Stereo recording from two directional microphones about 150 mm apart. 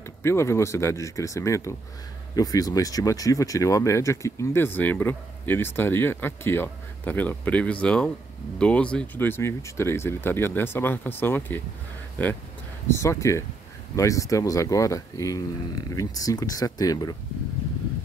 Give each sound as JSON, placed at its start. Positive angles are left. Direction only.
{"t": 0.2, "sound": "speech", "side_deg": 15}